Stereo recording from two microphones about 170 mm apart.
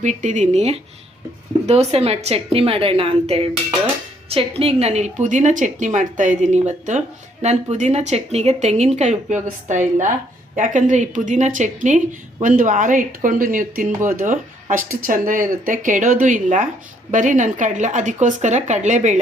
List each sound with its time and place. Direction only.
0.0 s a woman's voice: 45° right (ahead or behind)